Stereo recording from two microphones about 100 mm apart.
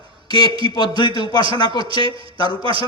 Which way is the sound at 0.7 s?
50° left (ahead or behind).